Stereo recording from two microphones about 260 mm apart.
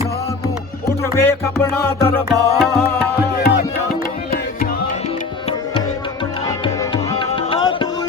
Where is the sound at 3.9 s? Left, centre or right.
Left.